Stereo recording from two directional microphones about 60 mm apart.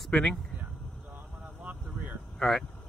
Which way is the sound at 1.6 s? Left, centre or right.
Right.